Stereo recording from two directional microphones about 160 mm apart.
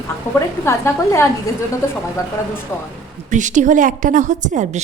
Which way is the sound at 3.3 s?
50° right (ahead or behind).